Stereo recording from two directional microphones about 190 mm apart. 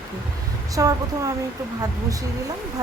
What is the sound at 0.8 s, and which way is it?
Speech, 15° right (ahead or behind).